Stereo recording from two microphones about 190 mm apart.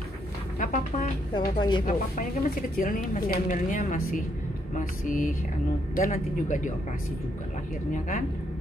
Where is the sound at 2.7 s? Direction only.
50° left (ahead or behind).